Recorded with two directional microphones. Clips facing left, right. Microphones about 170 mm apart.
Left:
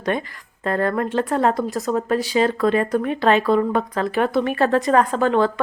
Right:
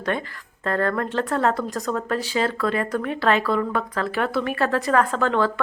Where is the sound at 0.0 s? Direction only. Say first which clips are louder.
Left 3 dB; 15° left (ahead or behind).